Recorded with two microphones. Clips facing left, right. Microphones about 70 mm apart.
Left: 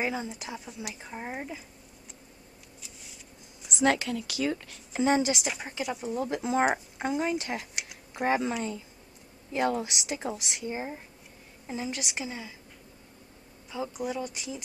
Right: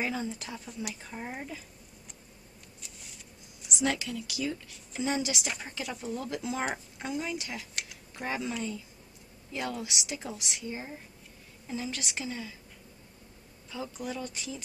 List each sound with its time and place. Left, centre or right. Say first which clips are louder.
0.0 s a woman's voice: left 1 dB; centre
2.8 s a sound: even; centre
3.8 s a woman's voice: left 5 dB; left
5.6 s a woman's voice: left 4 dB; centre; by 7.6 s left
7.7 s typing: left 1 dB; centre
8.2 s a woman's voice: left 6 dB; left; by 12.5 s centre
13.7 s a woman's voice: left 4 dB; centre